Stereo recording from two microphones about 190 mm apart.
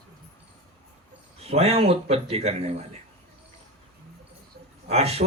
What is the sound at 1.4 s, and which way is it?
Speech, 35° right (ahead or behind).